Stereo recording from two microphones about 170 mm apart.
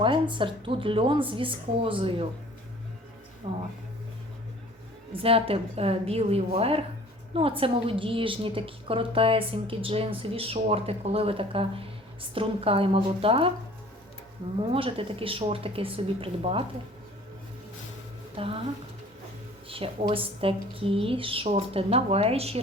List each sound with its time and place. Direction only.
0.0 s a woman's voice: 30° right (ahead or behind)
3.4 s a woman's voice: 30° right (ahead or behind)
5.1 s a woman's voice: 35° right (ahead or behind)
14.6 s a woman's voice: 35° right (ahead or behind)
18.3 s a woman's voice: 35° right (ahead or behind)
19.6 s a woman's voice: 35° right (ahead or behind)